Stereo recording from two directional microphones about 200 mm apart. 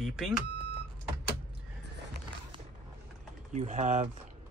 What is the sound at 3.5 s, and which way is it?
Speech, 35° right (ahead or behind).